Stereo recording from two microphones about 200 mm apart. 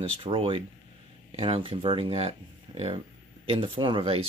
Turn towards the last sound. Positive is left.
turn(degrees=-25)  # may be behind; listen again after turning